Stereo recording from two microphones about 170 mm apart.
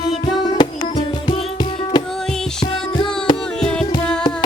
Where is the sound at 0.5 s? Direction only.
30° left (ahead or behind).